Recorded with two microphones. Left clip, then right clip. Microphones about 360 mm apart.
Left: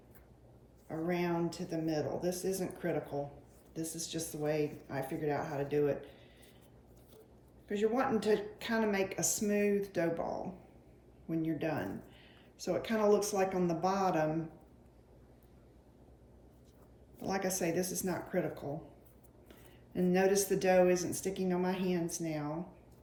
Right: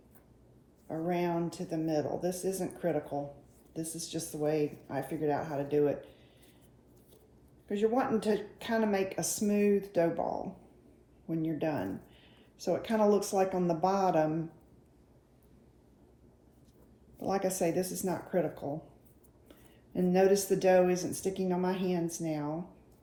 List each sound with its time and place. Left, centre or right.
0.9 s speech: centre
7.7 s speech: centre
17.2 s speech: centre